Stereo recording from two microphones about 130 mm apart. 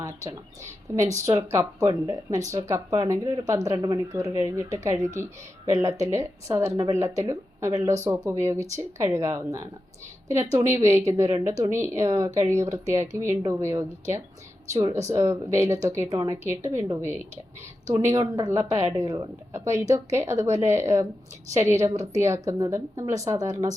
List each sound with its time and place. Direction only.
0.0 s speech: 25° right (ahead or behind)